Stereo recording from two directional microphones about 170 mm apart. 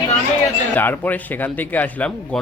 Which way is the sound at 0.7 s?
10° left (ahead or behind).